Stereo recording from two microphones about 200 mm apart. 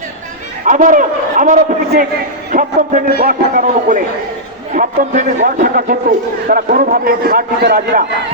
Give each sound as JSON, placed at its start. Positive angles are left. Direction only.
{"t": 0.6, "sound": "a man's voice", "side_deg": -40}